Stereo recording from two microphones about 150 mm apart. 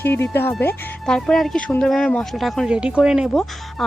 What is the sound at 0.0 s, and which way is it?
Speech, 15° left (ahead or behind).